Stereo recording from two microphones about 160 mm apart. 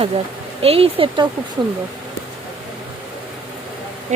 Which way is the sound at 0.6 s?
35° right (ahead or behind).